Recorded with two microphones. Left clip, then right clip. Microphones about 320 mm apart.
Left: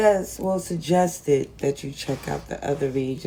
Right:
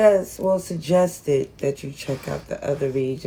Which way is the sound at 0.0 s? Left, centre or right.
Centre.